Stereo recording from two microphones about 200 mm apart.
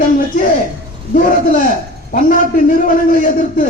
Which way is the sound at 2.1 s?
40° left (ahead or behind).